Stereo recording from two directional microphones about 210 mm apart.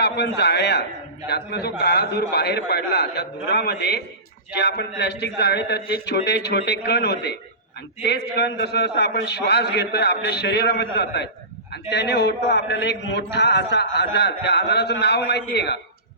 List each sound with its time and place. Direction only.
0.0 s a man's voice: 55° left (ahead or behind)